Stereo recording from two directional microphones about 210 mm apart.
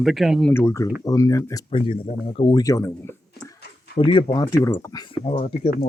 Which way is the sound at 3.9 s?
25° left (ahead or behind).